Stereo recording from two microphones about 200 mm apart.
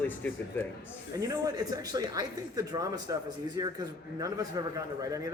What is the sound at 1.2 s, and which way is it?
A man's voice, 15° right (ahead or behind).